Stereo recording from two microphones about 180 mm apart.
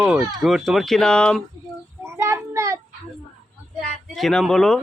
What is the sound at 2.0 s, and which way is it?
Child singing, 15° right (ahead or behind).